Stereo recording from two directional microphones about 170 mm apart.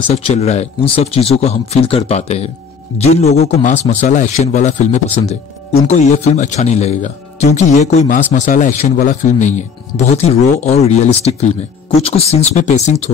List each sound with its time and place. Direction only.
0.1 s a man's voice: 40° left (ahead or behind)